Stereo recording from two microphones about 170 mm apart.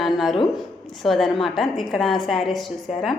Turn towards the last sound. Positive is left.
turn(degrees=0)  # may be behind; listen again after turning